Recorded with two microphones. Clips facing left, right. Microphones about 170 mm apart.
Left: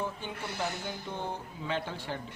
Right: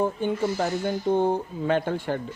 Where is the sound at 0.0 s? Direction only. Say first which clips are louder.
Right 12 dB; 50° right (ahead or behind).